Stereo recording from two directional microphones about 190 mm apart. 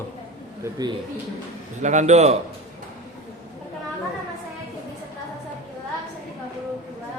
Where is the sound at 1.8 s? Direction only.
40° right (ahead or behind).